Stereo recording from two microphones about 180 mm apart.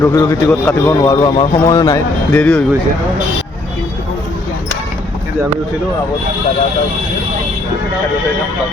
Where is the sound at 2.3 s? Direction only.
5° left (ahead or behind).